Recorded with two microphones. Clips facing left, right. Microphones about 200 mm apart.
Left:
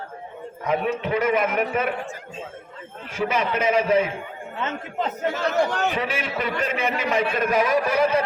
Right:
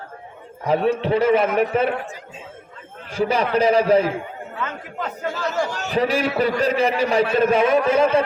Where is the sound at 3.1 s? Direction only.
35° right (ahead or behind).